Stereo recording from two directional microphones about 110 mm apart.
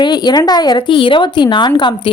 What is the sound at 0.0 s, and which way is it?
Speech, 40° left (ahead or behind).